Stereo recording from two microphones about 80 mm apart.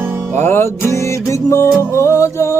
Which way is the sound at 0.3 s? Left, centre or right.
Left.